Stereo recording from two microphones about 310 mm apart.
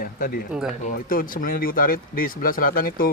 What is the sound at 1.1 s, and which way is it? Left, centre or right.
Speech, left.